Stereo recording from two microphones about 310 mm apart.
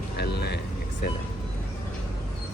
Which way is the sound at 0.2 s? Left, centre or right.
Left.